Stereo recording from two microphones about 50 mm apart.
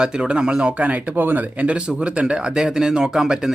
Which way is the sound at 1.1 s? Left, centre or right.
Right.